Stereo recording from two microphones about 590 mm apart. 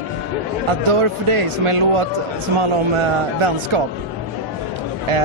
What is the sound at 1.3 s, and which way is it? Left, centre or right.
Speech, right.